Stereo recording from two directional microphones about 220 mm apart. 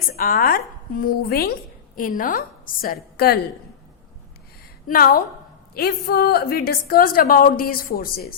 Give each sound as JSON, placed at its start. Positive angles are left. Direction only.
{"t": 0.2, "sound": "a woman's voice", "side_deg": 40}
{"t": 4.9, "sound": "a woman's voice", "side_deg": 40}